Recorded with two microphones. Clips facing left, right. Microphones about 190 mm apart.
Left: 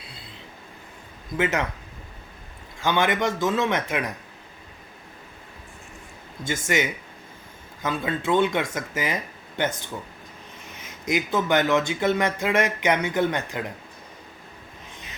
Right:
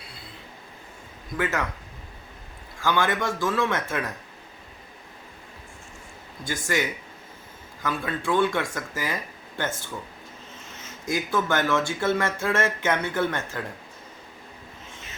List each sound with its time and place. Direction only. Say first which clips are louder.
1.4 s speech: left 3 dB; 20° left (ahead or behind)
2.8 s speech: left 2 dB; 20° left (ahead or behind)
6.4 s speech: left 2 dB; 20° left (ahead or behind)
10.7 s speech: left 3 dB; 15° left (ahead or behind)